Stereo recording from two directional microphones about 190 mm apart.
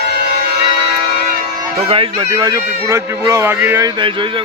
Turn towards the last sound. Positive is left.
turn(degrees=-10)  # may be behind; listen again after turning